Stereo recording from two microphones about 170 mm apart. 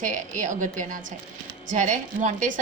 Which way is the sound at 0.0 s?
45° right (ahead or behind).